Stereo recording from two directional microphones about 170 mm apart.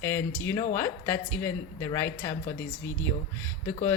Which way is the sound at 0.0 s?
15° left (ahead or behind).